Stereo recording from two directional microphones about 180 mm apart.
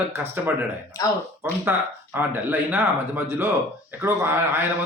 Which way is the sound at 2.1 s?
10° right (ahead or behind).